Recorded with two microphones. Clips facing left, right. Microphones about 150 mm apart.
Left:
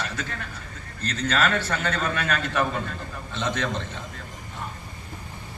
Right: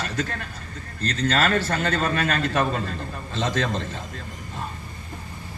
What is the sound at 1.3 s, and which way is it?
A man's voice, 35° right (ahead or behind).